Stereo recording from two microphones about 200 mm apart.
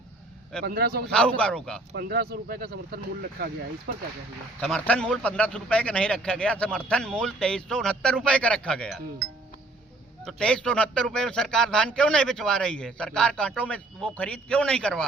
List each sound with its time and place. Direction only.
0.6 s speech: 50° right (ahead or behind)
1.0 s speech: 5° left (ahead or behind)
1.9 s speech: 55° right (ahead or behind)
4.6 s speech: 5° left (ahead or behind)
10.2 s speech: 5° left (ahead or behind)